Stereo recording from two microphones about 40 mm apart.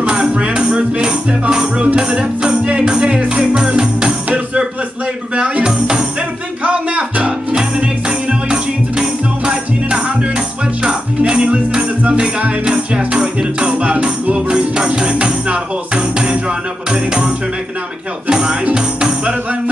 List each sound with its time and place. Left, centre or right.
0.0 s music: right
0.7 s speech: right
2.0 s music: right
5.3 s music: right
6.6 s music: right
18.3 s music: centre